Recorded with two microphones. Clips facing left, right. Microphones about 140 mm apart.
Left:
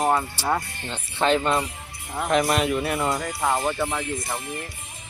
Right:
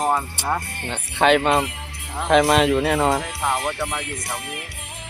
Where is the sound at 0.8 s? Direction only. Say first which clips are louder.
Right 4 dB; 60° right (ahead or behind); by 3.7 s 90° right.